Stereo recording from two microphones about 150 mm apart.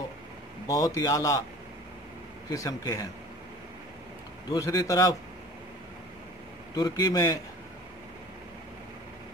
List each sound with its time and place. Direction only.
0.7 s speech: 20° left (ahead or behind)
2.5 s speech: 20° left (ahead or behind)
4.5 s speech: 20° left (ahead or behind)
6.7 s speech: 25° left (ahead or behind)